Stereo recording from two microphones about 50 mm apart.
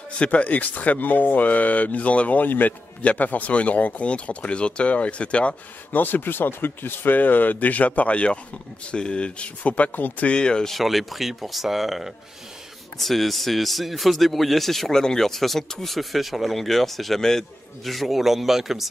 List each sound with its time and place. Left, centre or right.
0.2 s speech: left
5.9 s speech: left
10.2 s speech: centre
10.7 s a man's voice: centre